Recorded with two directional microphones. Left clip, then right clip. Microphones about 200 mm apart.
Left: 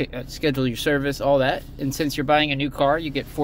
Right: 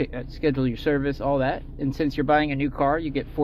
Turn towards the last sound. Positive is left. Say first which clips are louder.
# left 2 dB
turn(degrees=15)  # may be behind; listen again after turning